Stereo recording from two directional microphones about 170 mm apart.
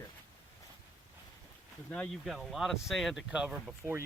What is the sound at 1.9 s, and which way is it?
Speech, 5° left (ahead or behind).